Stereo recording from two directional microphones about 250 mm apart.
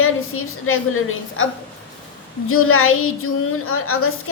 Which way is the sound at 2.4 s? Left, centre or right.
Left.